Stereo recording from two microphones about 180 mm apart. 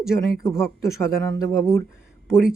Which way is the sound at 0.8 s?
15° left (ahead or behind).